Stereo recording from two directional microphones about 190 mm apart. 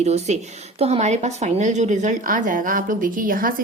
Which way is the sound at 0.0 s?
35° right (ahead or behind).